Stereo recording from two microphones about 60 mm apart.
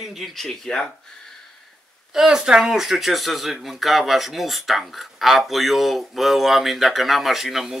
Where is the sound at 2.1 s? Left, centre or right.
Centre.